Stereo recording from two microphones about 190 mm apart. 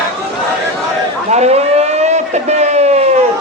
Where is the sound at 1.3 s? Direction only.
35° right (ahead or behind).